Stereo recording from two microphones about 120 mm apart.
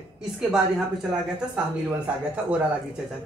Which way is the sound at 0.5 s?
5° right (ahead or behind).